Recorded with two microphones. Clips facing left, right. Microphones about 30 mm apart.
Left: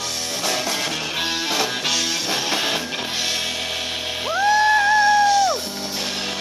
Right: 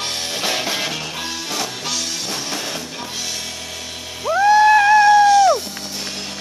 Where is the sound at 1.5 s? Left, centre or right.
Centre.